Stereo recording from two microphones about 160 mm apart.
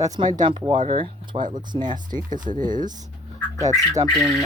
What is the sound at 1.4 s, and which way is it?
Speech, 55° right (ahead or behind).